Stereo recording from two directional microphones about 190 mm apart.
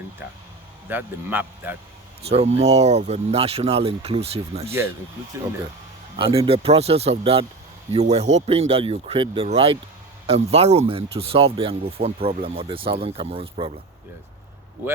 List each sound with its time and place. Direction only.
0.9 s a man's voice: 10° right (ahead or behind)
2.3 s speech: 35° right (ahead or behind)
6.1 s speech: 30° right (ahead or behind)